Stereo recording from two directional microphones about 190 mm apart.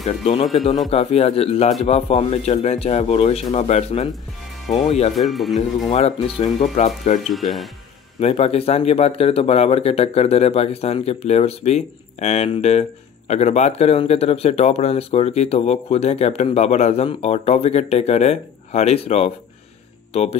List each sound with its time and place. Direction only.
0.8 s speech: 35° left (ahead or behind)
5.1 s speech: centre (ahead or behind)
5.9 s speech: 35° left (ahead or behind)
7.2 s speech: centre (ahead or behind)
8.2 s speech: 35° left (ahead or behind)